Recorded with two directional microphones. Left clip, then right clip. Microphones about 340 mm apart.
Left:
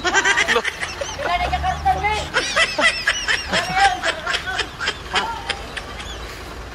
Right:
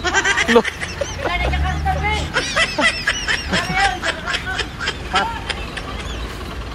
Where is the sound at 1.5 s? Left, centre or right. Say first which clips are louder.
Left 3 dB; left.